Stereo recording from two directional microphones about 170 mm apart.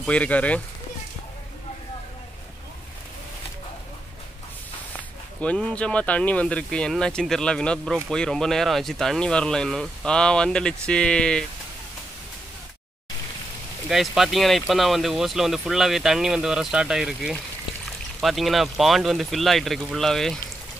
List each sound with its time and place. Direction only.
0.0 s speech: 5° left (ahead or behind)
5.4 s speech: 5° left (ahead or behind)
13.8 s speech: centre (ahead or behind)